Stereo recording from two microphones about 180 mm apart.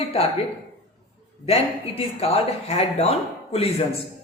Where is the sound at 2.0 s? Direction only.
35° left (ahead or behind).